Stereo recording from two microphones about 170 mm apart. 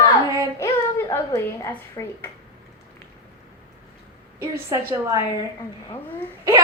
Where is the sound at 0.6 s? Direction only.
15° left (ahead or behind).